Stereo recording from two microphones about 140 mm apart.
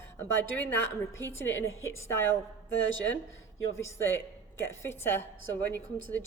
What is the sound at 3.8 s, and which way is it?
A woman's voice, 15° left (ahead or behind).